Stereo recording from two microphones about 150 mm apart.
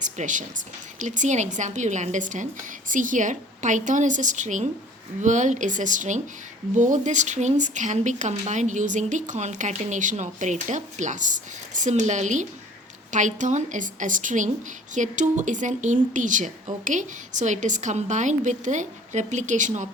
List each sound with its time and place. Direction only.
0.0 s a woman's voice: 55° right (ahead or behind)